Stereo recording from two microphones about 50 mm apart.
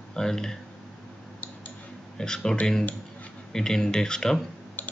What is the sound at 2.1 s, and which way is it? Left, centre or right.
Speech, centre.